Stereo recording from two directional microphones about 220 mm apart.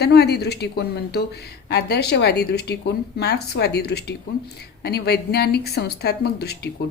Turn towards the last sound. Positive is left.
turn(degrees=45)  # may be behind; listen again after turning